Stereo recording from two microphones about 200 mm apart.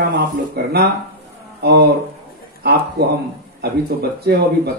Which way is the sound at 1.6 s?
55° right (ahead or behind).